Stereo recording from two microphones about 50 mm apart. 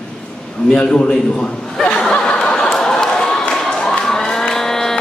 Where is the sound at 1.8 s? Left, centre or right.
Centre.